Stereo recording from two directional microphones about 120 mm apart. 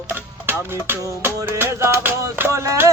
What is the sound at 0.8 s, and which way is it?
Music, 20° right (ahead or behind).